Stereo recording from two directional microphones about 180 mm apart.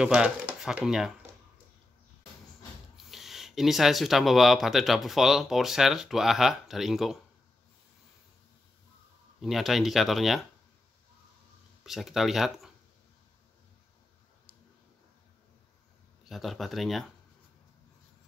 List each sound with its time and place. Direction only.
0.0 s speech: 5° right (ahead or behind)
3.1 s speech: centre (ahead or behind)
9.4 s speech: centre (ahead or behind)
11.8 s speech: centre (ahead or behind)
16.3 s speech: centre (ahead or behind)